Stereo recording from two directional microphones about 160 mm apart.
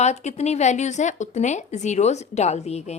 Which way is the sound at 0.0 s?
45° left (ahead or behind).